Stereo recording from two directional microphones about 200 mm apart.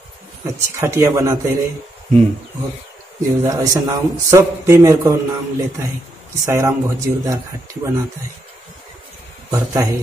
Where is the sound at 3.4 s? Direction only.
20° right (ahead or behind).